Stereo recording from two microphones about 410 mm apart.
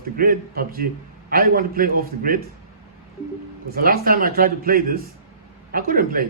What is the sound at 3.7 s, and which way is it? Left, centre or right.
A man's voice, right.